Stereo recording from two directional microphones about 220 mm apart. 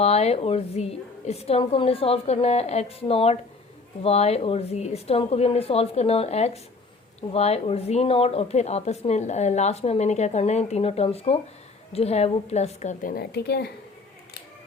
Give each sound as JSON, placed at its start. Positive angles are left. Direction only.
{"t": 0.0, "sound": "a woman's voice", "side_deg": 30}